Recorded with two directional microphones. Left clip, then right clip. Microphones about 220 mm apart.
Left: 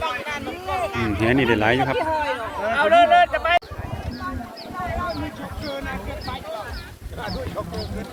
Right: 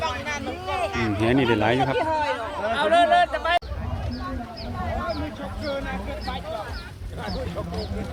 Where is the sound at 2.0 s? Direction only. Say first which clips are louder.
Left 1 dB; 30° left (ahead or behind).